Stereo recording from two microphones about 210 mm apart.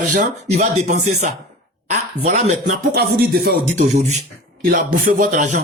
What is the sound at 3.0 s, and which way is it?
A man's voice, 45° right (ahead or behind).